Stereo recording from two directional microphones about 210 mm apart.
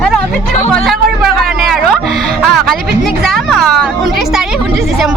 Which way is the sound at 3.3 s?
Centre (ahead or behind).